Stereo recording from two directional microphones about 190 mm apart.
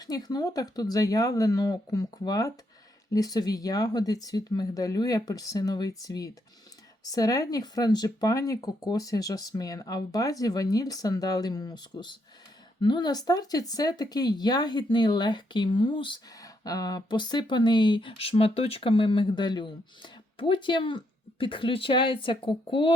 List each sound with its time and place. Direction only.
0.0 s speech: 20° left (ahead or behind)